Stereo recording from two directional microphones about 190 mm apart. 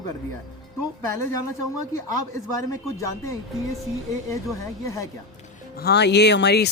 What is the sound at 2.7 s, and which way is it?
Speech, 15° left (ahead or behind).